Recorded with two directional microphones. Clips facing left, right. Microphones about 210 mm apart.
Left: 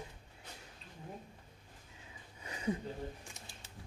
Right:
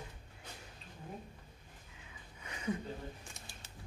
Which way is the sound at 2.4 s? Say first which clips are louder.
Left 1 dB; 35° left (ahead or behind).